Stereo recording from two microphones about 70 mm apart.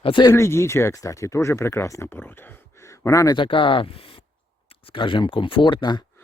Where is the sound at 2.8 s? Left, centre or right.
Left.